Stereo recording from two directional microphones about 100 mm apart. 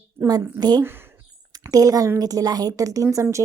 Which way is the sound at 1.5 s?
35° right (ahead or behind).